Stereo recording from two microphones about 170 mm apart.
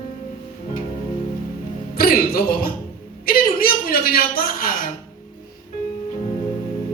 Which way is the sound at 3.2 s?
60° left (ahead or behind).